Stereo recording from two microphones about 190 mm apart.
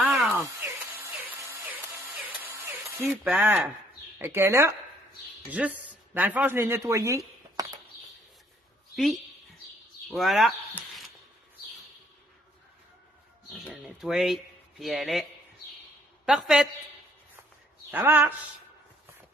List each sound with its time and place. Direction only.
0.0 s a sound: 10° right (ahead or behind)
3.1 s speech: 10° right (ahead or behind)
8.9 s a woman's voice: centre (ahead or behind)
13.5 s speech: centre (ahead or behind)
16.3 s a woman's voice: 5° right (ahead or behind)
17.9 s speech: 10° right (ahead or behind)